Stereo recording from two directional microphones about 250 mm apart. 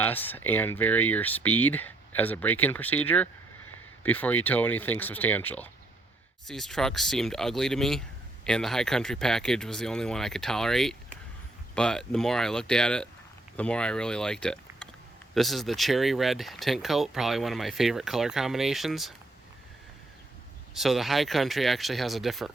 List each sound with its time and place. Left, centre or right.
0.0 s speech: centre
20.7 s speech: centre